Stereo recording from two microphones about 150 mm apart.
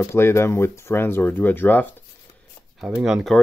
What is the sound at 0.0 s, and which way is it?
Speech, 15° left (ahead or behind).